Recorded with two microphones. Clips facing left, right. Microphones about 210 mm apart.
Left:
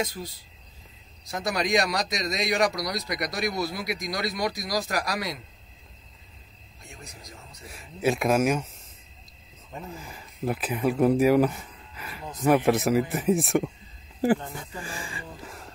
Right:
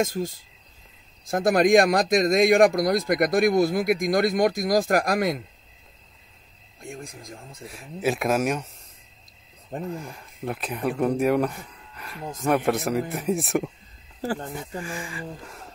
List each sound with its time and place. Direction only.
0.0 s a man's voice: 45° right (ahead or behind)
6.8 s a man's voice: 50° right (ahead or behind)
7.6 s speech: centre (ahead or behind)
9.9 s speech: centre (ahead or behind)
14.2 s speech: 15° left (ahead or behind)
14.8 s speech: 30° left (ahead or behind)
15.4 s speech: centre (ahead or behind)